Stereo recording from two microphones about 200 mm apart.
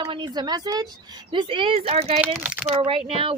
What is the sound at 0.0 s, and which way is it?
Speech, 25° right (ahead or behind).